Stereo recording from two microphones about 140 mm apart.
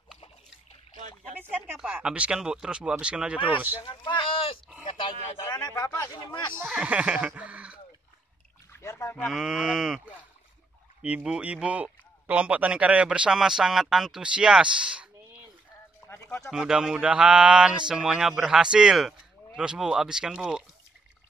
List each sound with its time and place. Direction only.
2.0 s speech: 10° right (ahead or behind)
3.8 s speech: 35° left (ahead or behind)
5.4 s speech: 25° left (ahead or behind)
6.7 s a sound: 10° right (ahead or behind)
8.7 s speech: 20° left (ahead or behind)
9.2 s speech: 5° right (ahead or behind)
16.1 s a sound: 15° left (ahead or behind)
16.4 s speech: 5° right (ahead or behind)